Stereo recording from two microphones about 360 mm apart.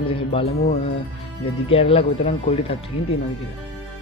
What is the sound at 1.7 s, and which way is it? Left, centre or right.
A man's voice, centre.